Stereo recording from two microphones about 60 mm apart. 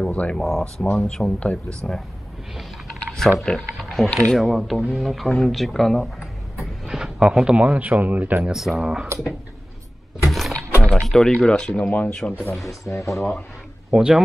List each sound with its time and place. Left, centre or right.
0.0 s speech: centre
0.4 s speech: centre; by 1.8 s left
3.1 s a sound: centre
3.4 s speech: centre
6.6 s speech: centre; by 8.5 s right
8.5 s speech: centre
10.3 s sewing machine: centre
11.1 s speech: centre
11.8 s speech: left
12.8 s speech: left
13.1 s speech: centre
13.8 s speech: centre